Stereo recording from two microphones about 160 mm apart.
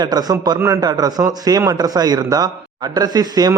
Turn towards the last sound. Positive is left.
turn(degrees=-25)  # may be behind; listen again after turning